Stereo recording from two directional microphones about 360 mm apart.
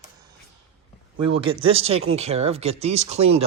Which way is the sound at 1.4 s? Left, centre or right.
Centre.